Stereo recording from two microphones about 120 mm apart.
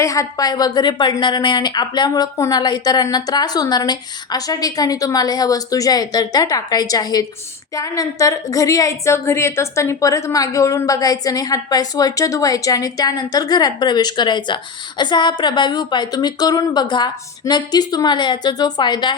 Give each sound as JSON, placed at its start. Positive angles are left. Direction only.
{"t": 0.0, "sound": "a woman's voice", "side_deg": 25}